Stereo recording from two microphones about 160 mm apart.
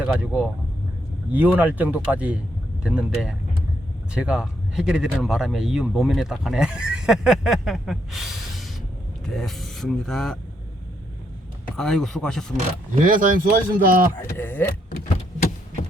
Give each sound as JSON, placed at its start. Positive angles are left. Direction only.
{"t": 0.0, "sound": "speech", "side_deg": 0}
{"t": 11.8, "sound": "speech", "side_deg": 5}
{"t": 13.0, "sound": "speech", "side_deg": -55}
{"t": 14.2, "sound": "speech", "side_deg": 15}